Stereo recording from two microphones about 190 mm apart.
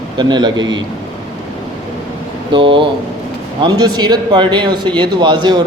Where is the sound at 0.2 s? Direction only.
25° right (ahead or behind).